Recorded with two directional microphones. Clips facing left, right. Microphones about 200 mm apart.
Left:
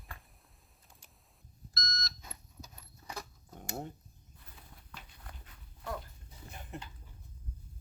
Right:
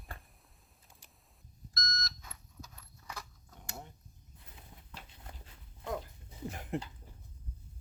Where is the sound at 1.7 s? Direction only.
30° left (ahead or behind).